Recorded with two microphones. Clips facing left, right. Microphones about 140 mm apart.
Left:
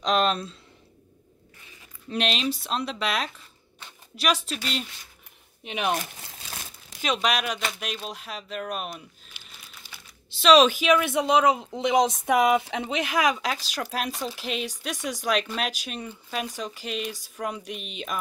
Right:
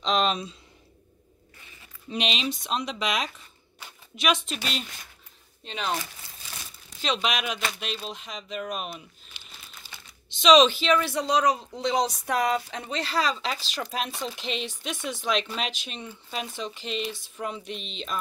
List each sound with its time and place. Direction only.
0.0 s speech: 5° left (ahead or behind)
2.0 s speech: centre (ahead or behind)
5.6 s speech: 15° left (ahead or behind)
7.0 s speech: 5° left (ahead or behind)
9.3 s crumpling: 10° left (ahead or behind)
10.4 s speech: 5° left (ahead or behind)
16.1 s speech: 5° right (ahead or behind)